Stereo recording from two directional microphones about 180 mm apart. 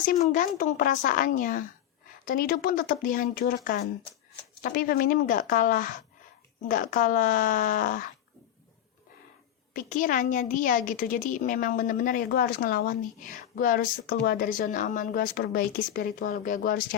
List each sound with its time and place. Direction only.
0.0 s a woman's voice: 45° left (ahead or behind)
9.7 s a woman's voice: 50° left (ahead or behind)